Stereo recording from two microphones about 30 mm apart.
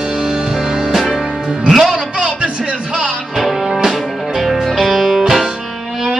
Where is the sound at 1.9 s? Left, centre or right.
Right.